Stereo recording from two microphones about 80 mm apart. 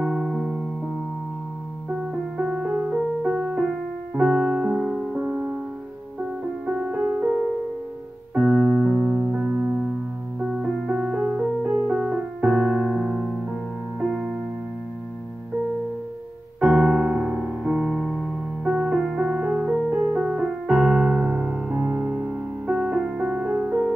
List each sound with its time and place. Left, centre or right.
0.0 s music: centre
1.9 s music: centre
4.1 s piano: centre
4.6 s music: centre
5.2 s music: centre
6.6 s music: centre
8.4 s keyboard: right
8.9 s music: right
10.4 s music: centre
12.4 s piano: centre
13.9 s music: centre
16.8 s music: centre
20.7 s piano: centre
22.9 s music: centre